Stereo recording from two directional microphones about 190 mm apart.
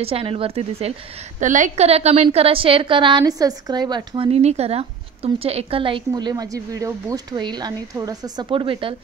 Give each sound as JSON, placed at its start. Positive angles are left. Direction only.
{"t": 0.0, "sound": "a woman's voice", "side_deg": -30}